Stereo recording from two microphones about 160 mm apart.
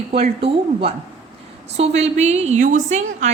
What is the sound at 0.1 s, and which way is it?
A woman's voice, 35° right (ahead or behind).